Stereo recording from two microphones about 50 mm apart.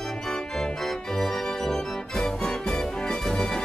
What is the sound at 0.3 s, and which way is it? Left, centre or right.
Organ, centre.